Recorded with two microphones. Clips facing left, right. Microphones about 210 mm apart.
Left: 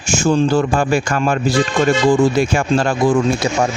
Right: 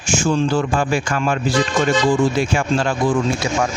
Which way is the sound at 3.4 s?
35° left (ahead or behind).